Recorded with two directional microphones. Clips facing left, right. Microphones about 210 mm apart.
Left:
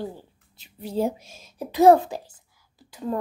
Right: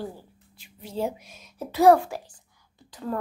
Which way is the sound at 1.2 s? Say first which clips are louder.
Left 2 dB; 25° left (ahead or behind).